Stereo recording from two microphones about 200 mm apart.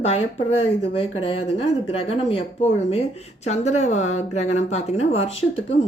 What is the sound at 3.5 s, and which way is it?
A woman's voice, 35° left (ahead or behind).